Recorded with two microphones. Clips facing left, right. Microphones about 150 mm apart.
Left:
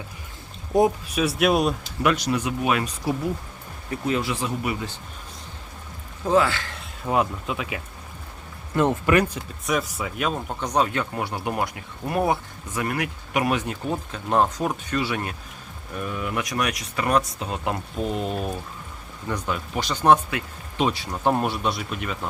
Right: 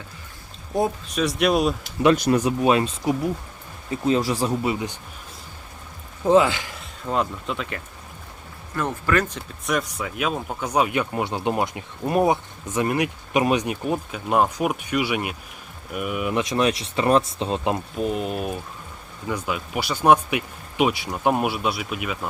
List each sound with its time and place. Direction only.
1.0 s speech: 5° left (ahead or behind)
2.1 s speech: 50° right (ahead or behind)
2.5 s speech: 30° right (ahead or behind)
4.0 s speech: 35° right (ahead or behind)
4.6 s speech: 20° right (ahead or behind)
6.2 s speech: 20° right (ahead or behind)
6.7 s speech: 10° left (ahead or behind)
8.7 s speech: 20° left (ahead or behind); by 17.7 s 25° right (ahead or behind)
17.9 s speech: 5° right (ahead or behind)